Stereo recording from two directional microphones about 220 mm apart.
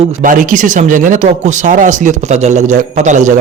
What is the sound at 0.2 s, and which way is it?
A man's voice, 35° right (ahead or behind).